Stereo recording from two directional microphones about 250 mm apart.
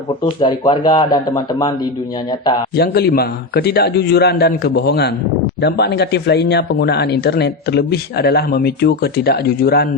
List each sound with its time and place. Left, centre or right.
0.3 s a man's voice: centre
2.7 s speech: left